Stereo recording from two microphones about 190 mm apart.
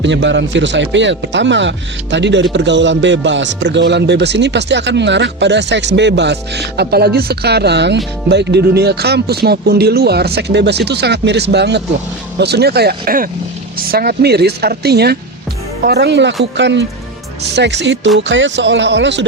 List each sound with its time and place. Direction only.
0.0 s speech: 70° right (ahead or behind)